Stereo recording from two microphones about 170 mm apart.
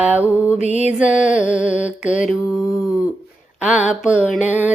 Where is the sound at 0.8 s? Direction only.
5° right (ahead or behind).